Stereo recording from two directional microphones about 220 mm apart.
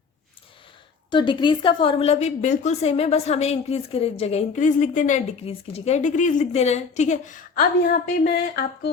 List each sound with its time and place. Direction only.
1.1 s a woman's voice: 20° left (ahead or behind); by 8.9 s 45° left (ahead or behind)